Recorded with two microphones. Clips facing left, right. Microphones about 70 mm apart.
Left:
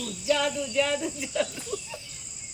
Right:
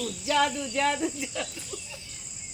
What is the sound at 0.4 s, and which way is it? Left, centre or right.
Speech, right.